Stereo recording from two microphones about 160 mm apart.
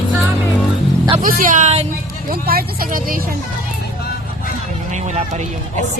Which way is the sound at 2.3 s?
65° right (ahead or behind).